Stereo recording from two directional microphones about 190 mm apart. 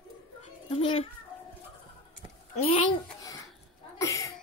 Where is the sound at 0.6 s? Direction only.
30° left (ahead or behind).